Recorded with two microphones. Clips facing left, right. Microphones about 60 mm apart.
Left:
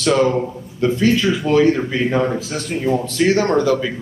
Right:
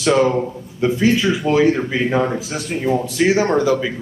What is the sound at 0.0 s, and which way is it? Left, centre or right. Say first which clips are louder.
Speech: even; centre.